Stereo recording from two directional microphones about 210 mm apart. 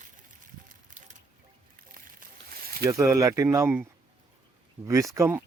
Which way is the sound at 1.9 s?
45° right (ahead or behind).